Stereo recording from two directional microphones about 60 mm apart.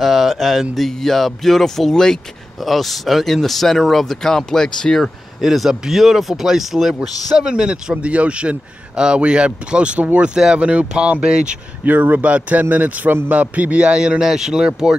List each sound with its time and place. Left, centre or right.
0.0 s a man's voice: centre